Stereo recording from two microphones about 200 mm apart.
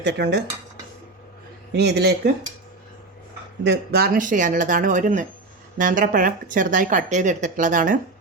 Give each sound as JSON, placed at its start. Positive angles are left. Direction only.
{"t": 0.0, "sound": "speech", "side_deg": -55}
{"t": 1.7, "sound": "speech", "side_deg": -55}
{"t": 3.6, "sound": "speech", "side_deg": -55}